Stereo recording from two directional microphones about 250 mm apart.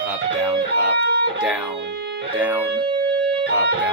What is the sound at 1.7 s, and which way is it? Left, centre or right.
Speech, right.